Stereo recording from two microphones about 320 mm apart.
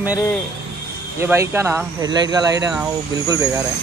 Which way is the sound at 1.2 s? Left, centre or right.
Centre.